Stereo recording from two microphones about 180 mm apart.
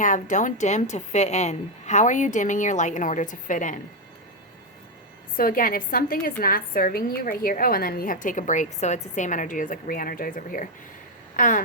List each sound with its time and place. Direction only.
0.0 s a woman's voice: 45° left (ahead or behind)
5.4 s a woman's voice: 50° left (ahead or behind)